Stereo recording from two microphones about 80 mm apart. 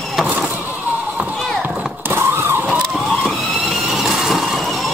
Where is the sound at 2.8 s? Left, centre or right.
Centre.